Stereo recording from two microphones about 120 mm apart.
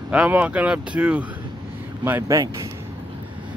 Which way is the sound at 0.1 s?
10° right (ahead or behind).